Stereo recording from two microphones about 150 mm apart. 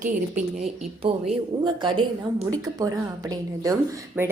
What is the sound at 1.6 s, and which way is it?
A woman's voice, 35° right (ahead or behind).